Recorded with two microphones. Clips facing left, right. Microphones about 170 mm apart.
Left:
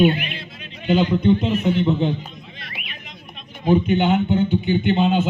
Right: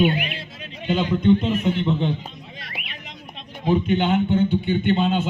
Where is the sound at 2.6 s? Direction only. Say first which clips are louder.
Right 1 dB; 35° right (ahead or behind).